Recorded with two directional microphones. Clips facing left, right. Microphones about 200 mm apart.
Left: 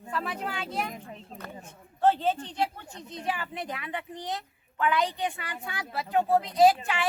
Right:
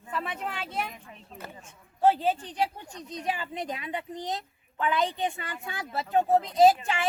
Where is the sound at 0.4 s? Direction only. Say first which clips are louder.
Left 1 dB; 5° right (ahead or behind).